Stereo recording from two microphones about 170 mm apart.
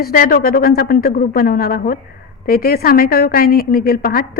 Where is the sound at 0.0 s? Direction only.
60° left (ahead or behind).